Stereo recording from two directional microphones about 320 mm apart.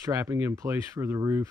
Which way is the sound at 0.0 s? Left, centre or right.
Centre.